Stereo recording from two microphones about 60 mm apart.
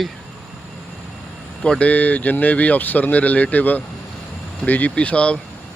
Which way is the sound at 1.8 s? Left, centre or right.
Left.